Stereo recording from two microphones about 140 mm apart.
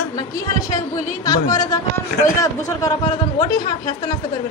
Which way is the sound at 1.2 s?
25° left (ahead or behind).